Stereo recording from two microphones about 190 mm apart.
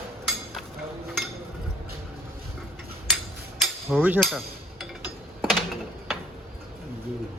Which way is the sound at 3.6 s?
5° right (ahead or behind).